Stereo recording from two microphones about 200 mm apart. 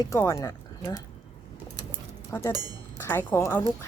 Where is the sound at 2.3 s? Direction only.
15° left (ahead or behind).